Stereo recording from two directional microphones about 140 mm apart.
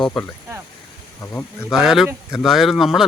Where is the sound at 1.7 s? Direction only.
5° right (ahead or behind).